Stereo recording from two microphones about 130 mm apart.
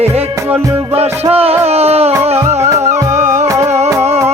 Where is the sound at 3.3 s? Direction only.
20° right (ahead or behind).